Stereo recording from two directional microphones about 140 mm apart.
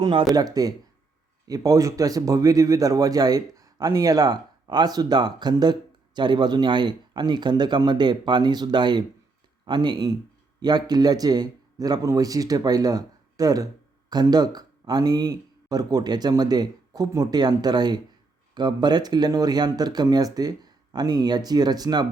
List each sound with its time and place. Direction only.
0.0 s a man's voice: 40° right (ahead or behind)
0.3 s a man's voice: 25° right (ahead or behind)